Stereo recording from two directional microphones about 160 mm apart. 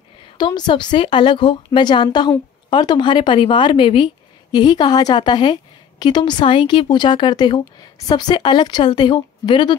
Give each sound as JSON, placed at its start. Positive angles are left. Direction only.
{"t": 0.4, "sound": "a woman's voice", "side_deg": 30}